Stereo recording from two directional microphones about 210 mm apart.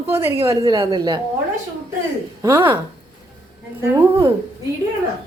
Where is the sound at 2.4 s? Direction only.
15° right (ahead or behind).